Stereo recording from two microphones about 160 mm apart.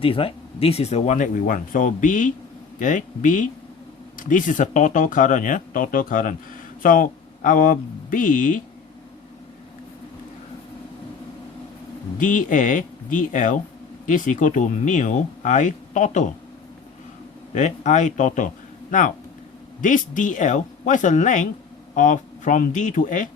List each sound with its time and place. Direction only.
0.0 s speech: 35° left (ahead or behind); by 8.6 s 55° left (ahead or behind)
12.1 s speech: 55° left (ahead or behind)
17.5 s a man's voice: 50° left (ahead or behind)